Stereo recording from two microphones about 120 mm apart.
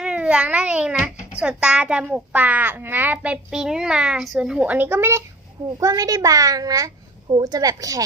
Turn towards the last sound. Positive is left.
turn(degrees=-30)  # may be behind; listen again after turning